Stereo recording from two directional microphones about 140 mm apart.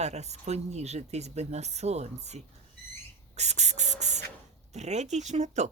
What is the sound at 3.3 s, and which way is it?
Spray, 55° right (ahead or behind).